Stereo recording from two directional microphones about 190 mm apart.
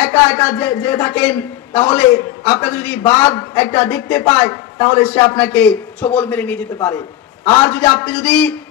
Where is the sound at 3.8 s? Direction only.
5° left (ahead or behind).